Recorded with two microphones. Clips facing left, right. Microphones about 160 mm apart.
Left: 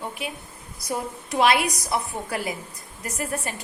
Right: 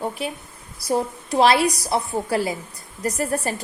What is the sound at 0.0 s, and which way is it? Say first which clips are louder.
A woman's voice: right 5 dB; 40° right (ahead or behind).